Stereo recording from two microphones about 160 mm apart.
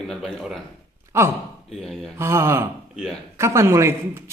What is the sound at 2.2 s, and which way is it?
A man's voice, 15° right (ahead or behind).